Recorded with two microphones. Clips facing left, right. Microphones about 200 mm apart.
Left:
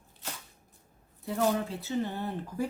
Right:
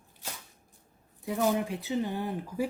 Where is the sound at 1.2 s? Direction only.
15° right (ahead or behind).